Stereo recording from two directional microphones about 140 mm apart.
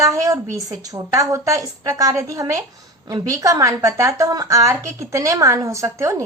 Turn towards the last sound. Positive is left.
turn(degrees=-20)  # may be behind; listen again after turning